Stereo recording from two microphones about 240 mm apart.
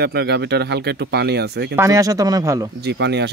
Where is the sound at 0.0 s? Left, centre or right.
Right.